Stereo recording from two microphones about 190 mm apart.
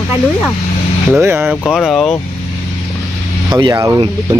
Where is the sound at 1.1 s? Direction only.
15° right (ahead or behind).